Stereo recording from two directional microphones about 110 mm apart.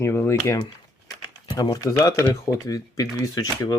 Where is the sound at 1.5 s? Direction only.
35° left (ahead or behind).